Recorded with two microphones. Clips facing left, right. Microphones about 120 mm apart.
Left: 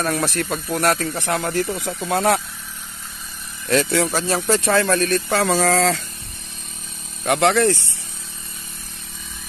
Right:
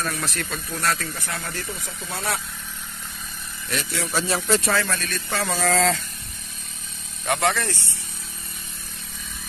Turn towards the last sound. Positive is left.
turn(degrees=60)  # may be behind; listen again after turning